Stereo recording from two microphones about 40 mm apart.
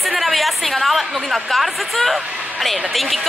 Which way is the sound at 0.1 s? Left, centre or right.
Centre.